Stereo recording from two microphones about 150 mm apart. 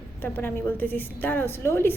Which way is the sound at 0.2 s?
15° left (ahead or behind).